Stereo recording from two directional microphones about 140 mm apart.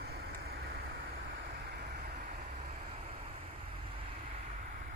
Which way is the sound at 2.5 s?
50° right (ahead or behind).